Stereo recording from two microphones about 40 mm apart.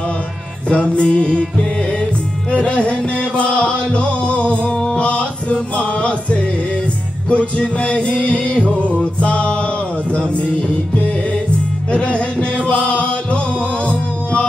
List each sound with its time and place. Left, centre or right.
0.7 s music: left
11.9 s music: left